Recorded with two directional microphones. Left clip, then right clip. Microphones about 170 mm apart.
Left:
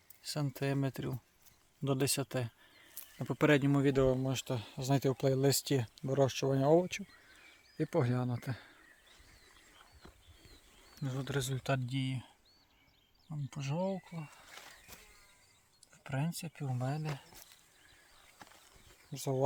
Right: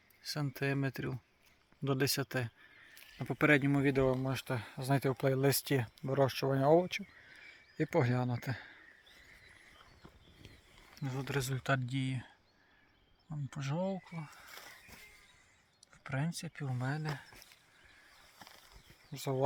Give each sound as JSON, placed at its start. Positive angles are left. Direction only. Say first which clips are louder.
{"t": 0.2, "sound": "speech", "louder": "even", "side_deg": 25}
{"t": 7.8, "sound": "speech", "louder": "right 1 dB", "side_deg": 5}
{"t": 10.9, "sound": "speech", "louder": "even", "side_deg": 25}
{"t": 13.5, "sound": "speech", "louder": "left 1 dB", "side_deg": 5}
{"t": 16.0, "sound": "speech", "louder": "even", "side_deg": 5}